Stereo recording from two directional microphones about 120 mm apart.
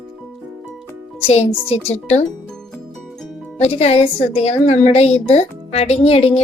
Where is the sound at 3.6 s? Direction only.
60° left (ahead or behind).